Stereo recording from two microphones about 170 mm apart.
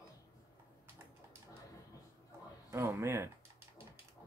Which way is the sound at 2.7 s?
15° right (ahead or behind).